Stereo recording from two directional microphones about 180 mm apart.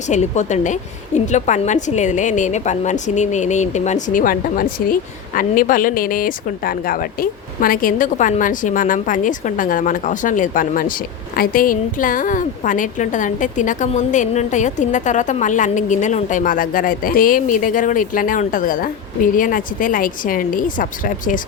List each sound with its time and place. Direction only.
0.1 s a woman's voice: 40° left (ahead or behind)